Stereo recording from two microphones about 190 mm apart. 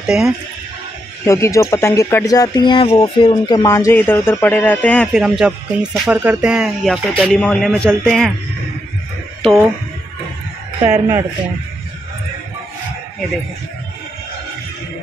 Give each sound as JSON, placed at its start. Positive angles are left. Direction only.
{"t": 0.0, "sound": "speech", "side_deg": -5}
{"t": 1.2, "sound": "speech", "side_deg": 15}
{"t": 10.8, "sound": "speech", "side_deg": -20}